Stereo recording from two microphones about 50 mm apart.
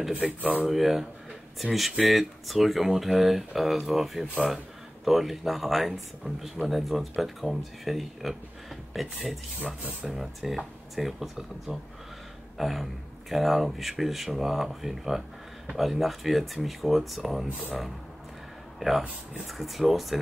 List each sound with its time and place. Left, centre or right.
0.1 s speech: right
0.7 s speech: centre
12.5 s a sound: centre
13.3 s speech: centre
18.8 s speech: centre